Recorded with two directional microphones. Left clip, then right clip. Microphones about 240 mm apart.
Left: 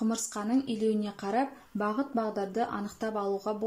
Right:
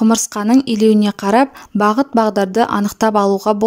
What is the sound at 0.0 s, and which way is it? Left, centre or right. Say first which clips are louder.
A woman's voice: right 17 dB; right.